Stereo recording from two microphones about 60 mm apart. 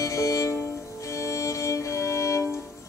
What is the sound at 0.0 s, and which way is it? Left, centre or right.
Music, left.